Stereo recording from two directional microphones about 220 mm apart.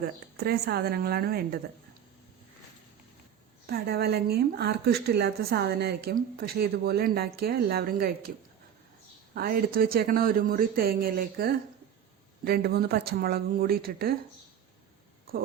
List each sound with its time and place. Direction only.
0.3 s speech: 45° right (ahead or behind)
3.7 s speech: 45° right (ahead or behind)
9.3 s speech: 45° right (ahead or behind)